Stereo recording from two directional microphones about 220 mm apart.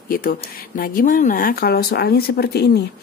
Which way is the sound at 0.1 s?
40° left (ahead or behind).